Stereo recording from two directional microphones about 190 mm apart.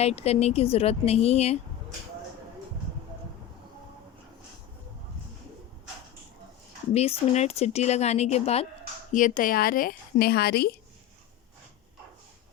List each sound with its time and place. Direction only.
0.0 s a woman's voice: 35° left (ahead or behind)
6.9 s a woman's voice: 35° left (ahead or behind); by 10.8 s 55° left (ahead or behind)